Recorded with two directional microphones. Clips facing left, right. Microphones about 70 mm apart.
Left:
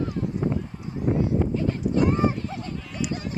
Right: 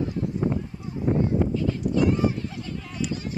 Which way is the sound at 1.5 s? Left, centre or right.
Left.